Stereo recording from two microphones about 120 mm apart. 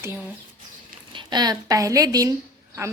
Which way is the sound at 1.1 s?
35° right (ahead or behind).